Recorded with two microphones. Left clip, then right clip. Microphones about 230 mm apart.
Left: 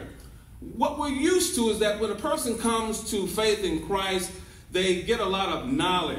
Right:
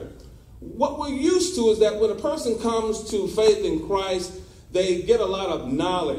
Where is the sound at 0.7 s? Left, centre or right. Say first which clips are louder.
Right 2 dB; left.